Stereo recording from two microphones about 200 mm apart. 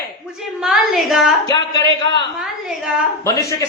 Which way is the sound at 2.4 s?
Centre (ahead or behind).